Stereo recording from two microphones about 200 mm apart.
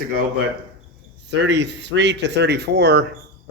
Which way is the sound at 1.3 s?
60° right (ahead or behind).